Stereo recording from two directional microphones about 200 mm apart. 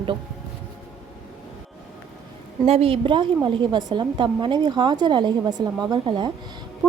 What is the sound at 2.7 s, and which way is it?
A woman's voice, 30° right (ahead or behind).